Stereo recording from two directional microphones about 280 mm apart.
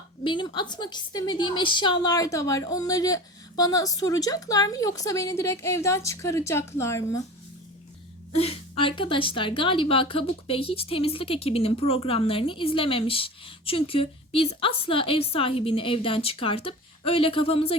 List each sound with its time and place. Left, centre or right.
0.3 s a woman's voice: centre
8.3 s a woman's voice: left